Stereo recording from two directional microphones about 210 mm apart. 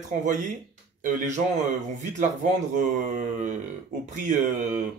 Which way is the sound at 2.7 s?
35° right (ahead or behind).